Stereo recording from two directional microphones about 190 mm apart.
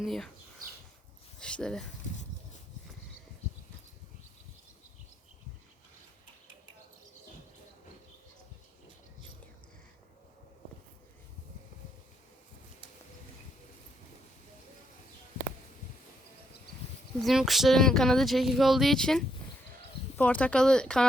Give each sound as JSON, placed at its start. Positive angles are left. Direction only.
{"t": 0.0, "sound": "speech", "side_deg": 0}
{"t": 1.4, "sound": "a sound", "side_deg": 5}
{"t": 17.2, "sound": "speech", "side_deg": 0}